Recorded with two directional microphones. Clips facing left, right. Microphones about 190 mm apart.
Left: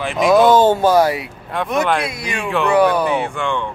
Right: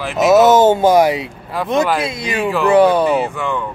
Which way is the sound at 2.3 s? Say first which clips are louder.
Right 3 dB; centre (ahead or behind).